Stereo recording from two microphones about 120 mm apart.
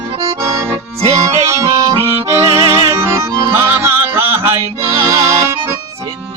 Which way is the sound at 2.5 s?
45° right (ahead or behind).